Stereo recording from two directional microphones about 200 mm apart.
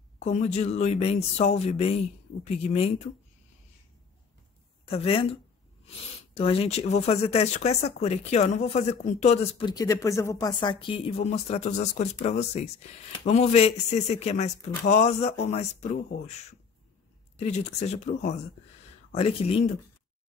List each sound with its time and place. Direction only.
0.2 s speech: 35° left (ahead or behind)
4.8 s speech: 30° left (ahead or behind)